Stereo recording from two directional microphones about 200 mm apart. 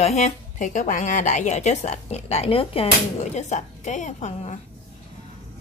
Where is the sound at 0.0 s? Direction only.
35° left (ahead or behind).